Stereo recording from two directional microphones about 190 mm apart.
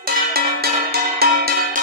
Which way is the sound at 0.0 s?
55° right (ahead or behind).